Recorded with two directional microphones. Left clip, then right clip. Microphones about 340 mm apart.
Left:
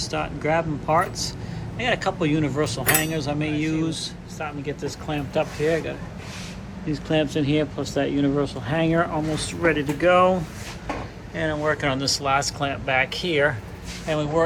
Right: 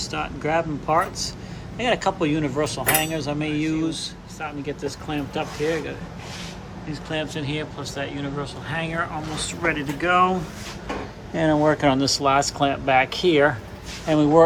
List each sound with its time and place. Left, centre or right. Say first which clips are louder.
0.1 s speech: even; centre